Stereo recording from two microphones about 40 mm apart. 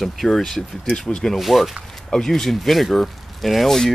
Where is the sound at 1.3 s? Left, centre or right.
Centre.